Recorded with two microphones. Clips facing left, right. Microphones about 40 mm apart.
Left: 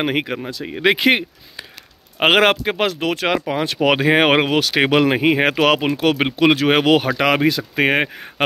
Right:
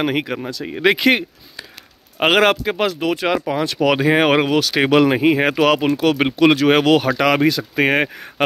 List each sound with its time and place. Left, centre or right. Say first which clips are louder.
0.0 s speech: even; left
0.7 s speech: right 1 dB; centre
0.9 s speech: even; left
2.1 s speech: even; left
3.4 s speech: even; left
5.2 s speech: right 1 dB; left
6.2 s speech: right 2 dB; centre